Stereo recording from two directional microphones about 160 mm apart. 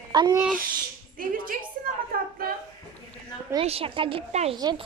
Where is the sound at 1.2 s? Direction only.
60° right (ahead or behind).